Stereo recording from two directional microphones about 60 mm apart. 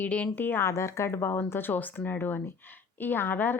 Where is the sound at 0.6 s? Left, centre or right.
Left.